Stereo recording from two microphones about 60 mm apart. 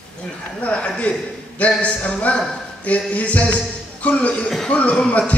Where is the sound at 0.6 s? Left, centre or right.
Left.